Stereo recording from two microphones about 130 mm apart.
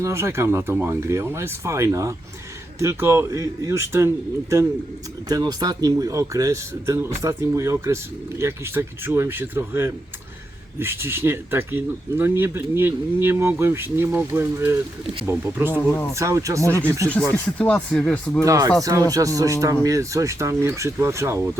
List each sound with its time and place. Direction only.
0.0 s speech: 20° right (ahead or behind)
15.0 s speech: 45° right (ahead or behind)
15.3 s speech: 15° right (ahead or behind)
17.3 s speech: 10° left (ahead or behind)
18.4 s speech: 25° right (ahead or behind)